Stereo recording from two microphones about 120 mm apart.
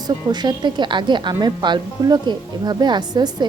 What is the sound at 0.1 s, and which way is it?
A woman's voice, 35° right (ahead or behind).